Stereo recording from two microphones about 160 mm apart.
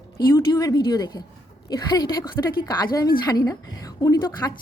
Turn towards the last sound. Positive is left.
turn(degrees=25)  # may be behind; listen again after turning